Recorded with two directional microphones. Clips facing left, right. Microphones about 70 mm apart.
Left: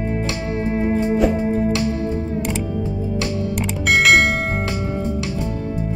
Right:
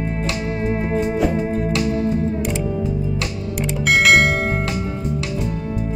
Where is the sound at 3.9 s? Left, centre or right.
Centre.